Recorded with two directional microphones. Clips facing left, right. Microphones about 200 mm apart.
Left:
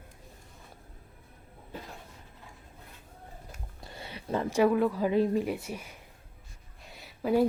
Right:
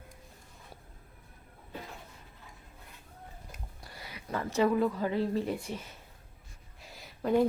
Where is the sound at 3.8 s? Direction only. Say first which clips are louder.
Left 6 dB; 25° left (ahead or behind).